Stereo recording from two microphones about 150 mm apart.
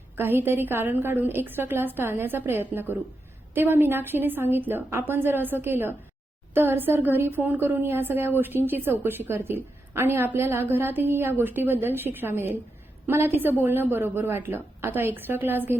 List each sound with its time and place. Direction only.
0.2 s a woman's voice: 15° right (ahead or behind)